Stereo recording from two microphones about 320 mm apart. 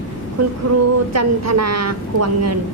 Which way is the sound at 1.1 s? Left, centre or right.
Right.